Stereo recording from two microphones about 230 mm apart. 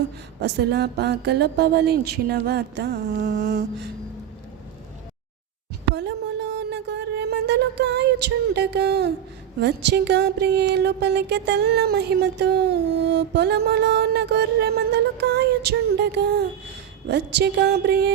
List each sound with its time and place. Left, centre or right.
0.4 s music: right
5.9 s a sound: right
9.6 s music: right